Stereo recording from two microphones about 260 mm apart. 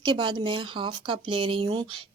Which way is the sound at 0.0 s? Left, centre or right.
Centre.